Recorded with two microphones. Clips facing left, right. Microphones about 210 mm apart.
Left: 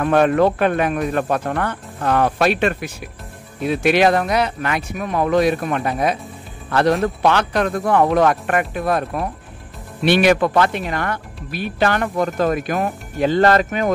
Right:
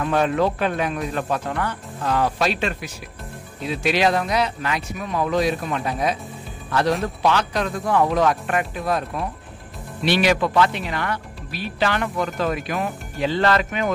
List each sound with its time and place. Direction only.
0.0 s speech: 55° left (ahead or behind)
7.2 s speech: 60° left (ahead or behind); by 13.9 s 40° left (ahead or behind)